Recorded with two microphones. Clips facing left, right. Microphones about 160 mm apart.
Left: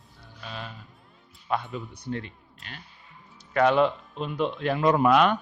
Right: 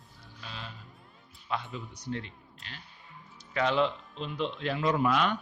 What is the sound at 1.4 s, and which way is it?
A man's voice, 50° left (ahead or behind).